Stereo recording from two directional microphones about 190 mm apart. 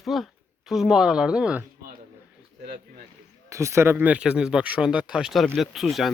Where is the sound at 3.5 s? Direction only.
15° right (ahead or behind).